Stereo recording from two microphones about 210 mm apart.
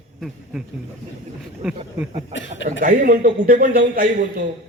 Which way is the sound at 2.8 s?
40° right (ahead or behind).